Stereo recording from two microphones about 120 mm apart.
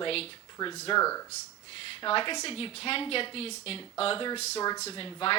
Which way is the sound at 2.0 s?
45° left (ahead or behind).